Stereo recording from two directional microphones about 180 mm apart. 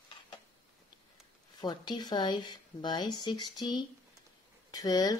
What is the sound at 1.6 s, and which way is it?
Speech, 25° left (ahead or behind).